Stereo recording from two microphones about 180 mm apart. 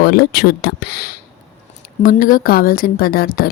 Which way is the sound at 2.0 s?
50° left (ahead or behind).